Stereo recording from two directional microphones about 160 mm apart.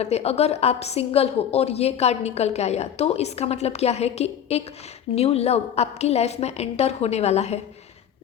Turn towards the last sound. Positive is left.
turn(degrees=40)  # may be behind; listen again after turning